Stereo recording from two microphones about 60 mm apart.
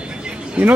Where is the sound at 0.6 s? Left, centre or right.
Right.